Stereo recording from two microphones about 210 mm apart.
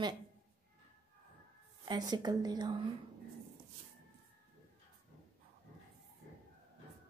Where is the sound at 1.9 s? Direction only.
20° right (ahead or behind).